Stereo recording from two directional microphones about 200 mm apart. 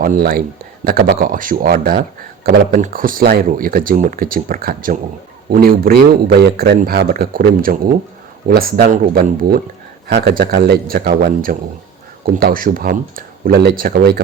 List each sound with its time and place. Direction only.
0.0 s speech: 45° right (ahead or behind)